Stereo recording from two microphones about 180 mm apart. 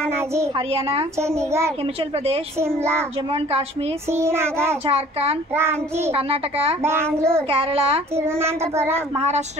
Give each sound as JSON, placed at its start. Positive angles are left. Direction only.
{"t": 0.6, "sound": "a child's voice", "side_deg": -35}
{"t": 1.2, "sound": "child singing", "side_deg": -15}
{"t": 4.1, "sound": "child singing", "side_deg": -15}
{"t": 4.8, "sound": "a child's voice", "side_deg": -35}
{"t": 5.5, "sound": "child singing", "side_deg": -15}
{"t": 6.1, "sound": "a child's voice", "side_deg": -35}
{"t": 6.8, "sound": "child singing", "side_deg": -15}
{"t": 7.4, "sound": "a child's voice", "side_deg": -30}
{"t": 8.2, "sound": "child singing", "side_deg": -15}
{"t": 9.1, "sound": "a child's voice", "side_deg": -40}